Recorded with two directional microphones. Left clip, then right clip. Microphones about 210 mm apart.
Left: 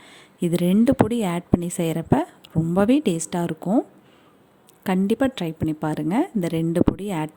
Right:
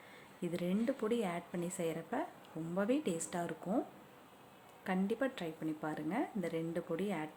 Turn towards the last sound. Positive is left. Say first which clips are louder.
# left 15 dB
turn(degrees=50)  # may be behind; listen again after turning